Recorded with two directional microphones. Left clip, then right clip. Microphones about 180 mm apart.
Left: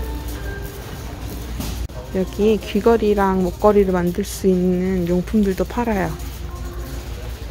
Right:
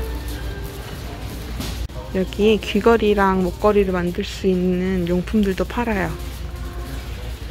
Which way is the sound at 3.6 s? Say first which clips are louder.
Left 3 dB; 15° left (ahead or behind).